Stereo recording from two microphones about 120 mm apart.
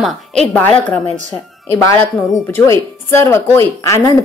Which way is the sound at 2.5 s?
25° left (ahead or behind).